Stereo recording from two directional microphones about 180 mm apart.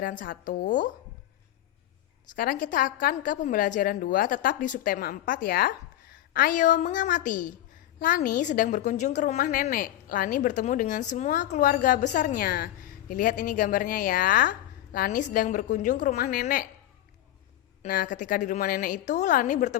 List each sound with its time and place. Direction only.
0.0 s a woman's voice: 50° left (ahead or behind)
2.3 s a woman's voice: 50° left (ahead or behind)
17.8 s a woman's voice: 50° left (ahead or behind)